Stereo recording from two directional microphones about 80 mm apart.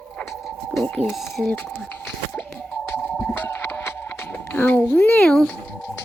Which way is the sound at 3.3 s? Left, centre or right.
Left.